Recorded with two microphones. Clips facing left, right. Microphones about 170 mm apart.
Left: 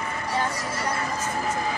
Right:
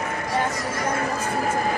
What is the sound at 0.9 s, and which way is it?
Speech, 55° right (ahead or behind).